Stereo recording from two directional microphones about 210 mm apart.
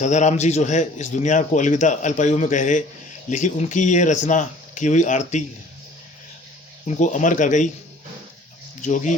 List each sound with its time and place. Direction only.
0.0 s a man's voice: 35° left (ahead or behind)
6.8 s a man's voice: 35° left (ahead or behind)
8.8 s a man's voice: 35° left (ahead or behind)